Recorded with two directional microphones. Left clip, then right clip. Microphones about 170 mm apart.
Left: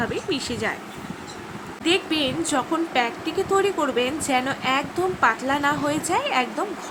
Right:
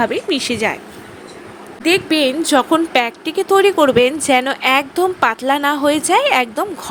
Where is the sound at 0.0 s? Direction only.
45° right (ahead or behind).